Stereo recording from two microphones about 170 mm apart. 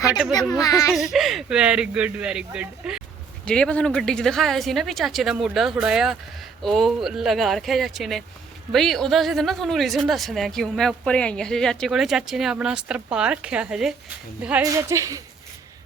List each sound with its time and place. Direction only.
0.6 s speech: 20° left (ahead or behind)
0.9 s speech: centre (ahead or behind)
3.4 s speech: 5° left (ahead or behind)
14.6 s a woman's voice: 15° right (ahead or behind)